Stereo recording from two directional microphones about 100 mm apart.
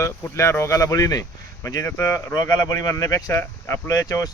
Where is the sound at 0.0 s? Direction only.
30° left (ahead or behind).